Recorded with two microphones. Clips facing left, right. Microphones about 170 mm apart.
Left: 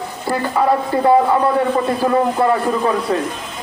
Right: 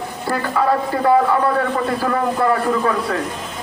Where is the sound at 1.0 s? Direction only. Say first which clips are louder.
Left 2 dB; 20° left (ahead or behind).